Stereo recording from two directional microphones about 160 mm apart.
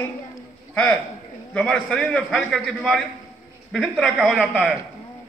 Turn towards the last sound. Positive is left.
turn(degrees=-5)  # may be behind; listen again after turning